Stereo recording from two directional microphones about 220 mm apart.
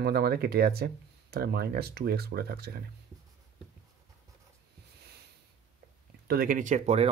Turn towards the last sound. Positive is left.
turn(degrees=-30)  # may be behind; listen again after turning